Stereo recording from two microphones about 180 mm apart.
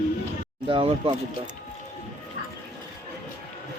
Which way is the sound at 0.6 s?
30° right (ahead or behind).